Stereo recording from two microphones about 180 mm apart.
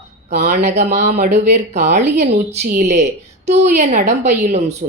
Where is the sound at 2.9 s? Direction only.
40° right (ahead or behind).